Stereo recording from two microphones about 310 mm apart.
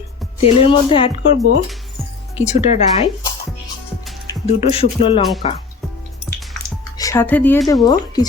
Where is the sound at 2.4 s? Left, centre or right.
Left.